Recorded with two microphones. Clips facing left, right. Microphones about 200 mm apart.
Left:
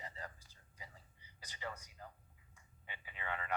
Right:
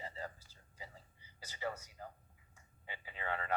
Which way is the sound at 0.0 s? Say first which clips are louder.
Right 4 dB; 30° right (ahead or behind).